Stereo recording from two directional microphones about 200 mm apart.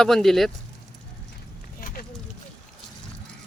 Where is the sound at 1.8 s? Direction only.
45° left (ahead or behind).